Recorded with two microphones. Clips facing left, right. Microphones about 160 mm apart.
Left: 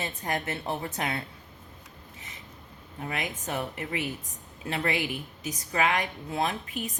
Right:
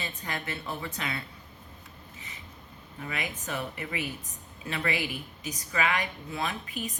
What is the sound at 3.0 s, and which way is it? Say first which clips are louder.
A woman's voice: left 2 dB; 50° left (ahead or behind).